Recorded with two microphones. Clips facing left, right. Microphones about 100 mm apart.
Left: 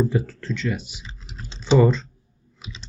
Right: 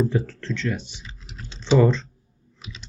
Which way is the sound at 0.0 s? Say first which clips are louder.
Left 1 dB; 10° left (ahead or behind).